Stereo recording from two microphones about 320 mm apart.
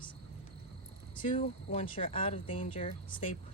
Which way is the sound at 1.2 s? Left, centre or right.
Left.